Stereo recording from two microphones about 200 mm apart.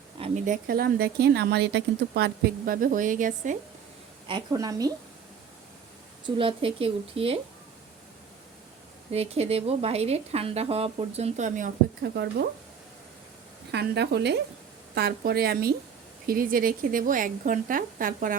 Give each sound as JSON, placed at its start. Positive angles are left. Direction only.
{"t": 0.2, "sound": "speech", "side_deg": -40}
{"t": 4.3, "sound": "a woman's voice", "side_deg": -20}
{"t": 6.2, "sound": "a woman's voice", "side_deg": -25}
{"t": 9.1, "sound": "a woman's voice", "side_deg": -30}
{"t": 13.7, "sound": "speech", "side_deg": -55}